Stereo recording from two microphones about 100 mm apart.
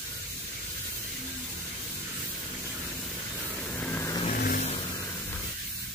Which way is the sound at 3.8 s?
20° left (ahead or behind).